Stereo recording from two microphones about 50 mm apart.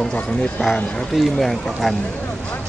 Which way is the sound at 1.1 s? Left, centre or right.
Centre.